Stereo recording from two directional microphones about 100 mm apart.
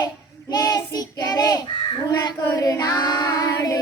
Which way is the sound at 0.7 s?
40° left (ahead or behind).